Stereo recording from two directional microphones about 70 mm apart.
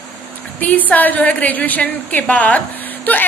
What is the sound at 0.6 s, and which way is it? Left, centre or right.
A woman's voice, left.